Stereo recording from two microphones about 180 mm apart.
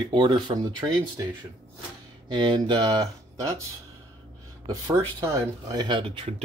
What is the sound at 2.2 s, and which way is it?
Speech, 25° right (ahead or behind).